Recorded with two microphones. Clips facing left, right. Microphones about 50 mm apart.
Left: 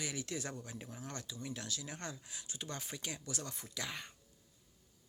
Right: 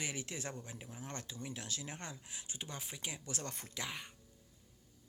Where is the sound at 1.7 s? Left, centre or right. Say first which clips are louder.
Left 1 dB; right.